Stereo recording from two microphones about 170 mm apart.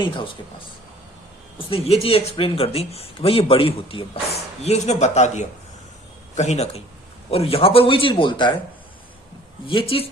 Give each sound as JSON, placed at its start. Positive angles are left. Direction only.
{"t": 1.5, "sound": "speech", "side_deg": 35}
{"t": 9.6, "sound": "speech", "side_deg": 30}